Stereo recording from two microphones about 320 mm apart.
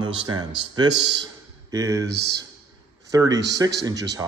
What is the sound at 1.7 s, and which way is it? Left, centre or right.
Speech, centre.